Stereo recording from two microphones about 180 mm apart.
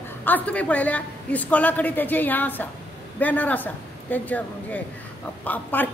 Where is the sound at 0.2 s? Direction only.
10° left (ahead or behind).